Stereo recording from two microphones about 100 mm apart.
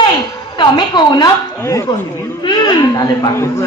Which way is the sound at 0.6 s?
45° left (ahead or behind).